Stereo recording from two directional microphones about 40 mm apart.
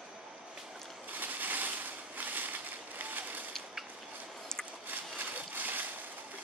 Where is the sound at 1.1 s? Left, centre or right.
Right.